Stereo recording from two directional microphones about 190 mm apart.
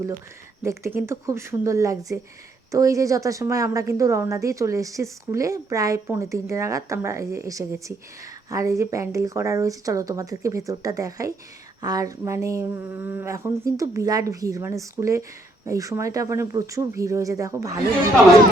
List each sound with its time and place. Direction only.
0.6 s a woman's voice: 15° right (ahead or behind)